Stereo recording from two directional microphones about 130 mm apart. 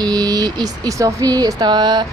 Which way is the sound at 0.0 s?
30° right (ahead or behind).